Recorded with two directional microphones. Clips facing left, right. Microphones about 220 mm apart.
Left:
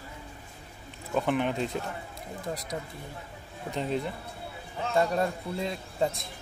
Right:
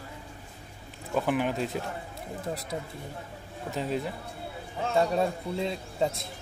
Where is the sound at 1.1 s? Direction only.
5° right (ahead or behind).